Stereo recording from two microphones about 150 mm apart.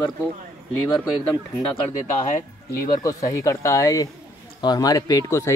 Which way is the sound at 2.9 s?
25° left (ahead or behind).